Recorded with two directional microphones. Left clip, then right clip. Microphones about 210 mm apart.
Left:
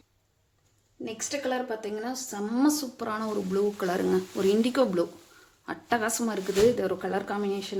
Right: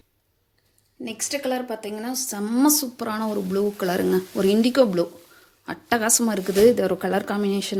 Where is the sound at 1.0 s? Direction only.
35° right (ahead or behind).